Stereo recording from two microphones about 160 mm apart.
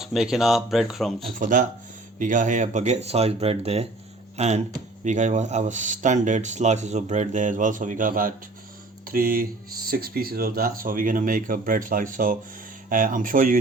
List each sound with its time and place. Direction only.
0.0 s speech: 5° right (ahead or behind)
1.4 s speech: 55° right (ahead or behind)